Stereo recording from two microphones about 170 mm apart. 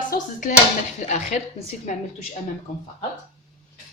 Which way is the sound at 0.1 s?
50° left (ahead or behind).